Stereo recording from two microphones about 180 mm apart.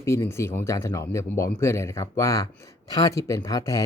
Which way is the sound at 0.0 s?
15° left (ahead or behind).